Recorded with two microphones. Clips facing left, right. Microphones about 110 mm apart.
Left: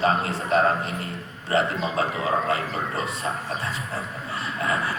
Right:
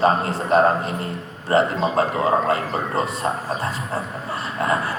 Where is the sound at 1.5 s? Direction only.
40° right (ahead or behind).